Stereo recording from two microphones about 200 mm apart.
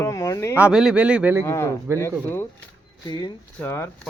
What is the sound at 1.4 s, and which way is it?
Speech, 15° left (ahead or behind).